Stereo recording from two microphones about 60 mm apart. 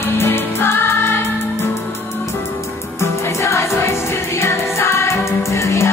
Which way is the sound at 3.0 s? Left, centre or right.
Left.